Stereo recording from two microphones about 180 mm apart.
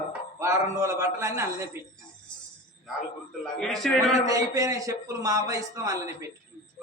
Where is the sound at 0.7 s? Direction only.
15° right (ahead or behind).